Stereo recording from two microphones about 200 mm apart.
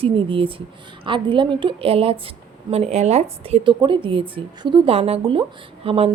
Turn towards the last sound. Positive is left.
turn(degrees=-30)  # may be behind; listen again after turning